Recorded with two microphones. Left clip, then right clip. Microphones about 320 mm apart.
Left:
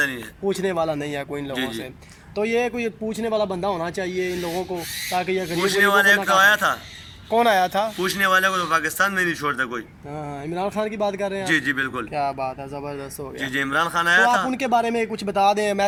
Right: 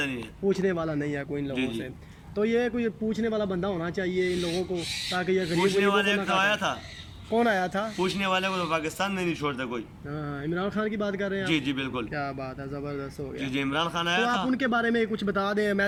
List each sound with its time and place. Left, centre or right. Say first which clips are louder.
0.4 s a man's voice: left 4 dB; centre
2.3 s a man's voice: left 4 dB; centre
3.2 s speech: left 8 dB; left
3.8 s a man's voice: left 4 dB; centre
5.4 s speech: left 2 dB; left
5.6 s speech: left 9 dB; centre
7.3 s a man's voice: left 7 dB; centre
7.9 s speech: left 7 dB; centre
10.5 s a man's voice: left 5 dB; centre
11.4 s speech: left 7 dB; centre
12.1 s a man's voice: left 9 dB; centre
13.4 s speech: left 7 dB; centre
14.5 s a man's voice: left 5 dB; centre